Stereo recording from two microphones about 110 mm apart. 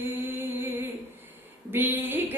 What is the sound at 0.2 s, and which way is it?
Music, 20° right (ahead or behind).